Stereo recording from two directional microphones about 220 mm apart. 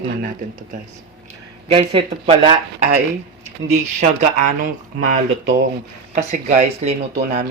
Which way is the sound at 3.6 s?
30° right (ahead or behind).